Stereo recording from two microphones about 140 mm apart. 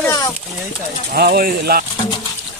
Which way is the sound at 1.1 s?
90° right.